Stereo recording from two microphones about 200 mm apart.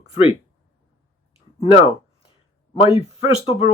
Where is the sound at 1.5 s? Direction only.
30° left (ahead or behind).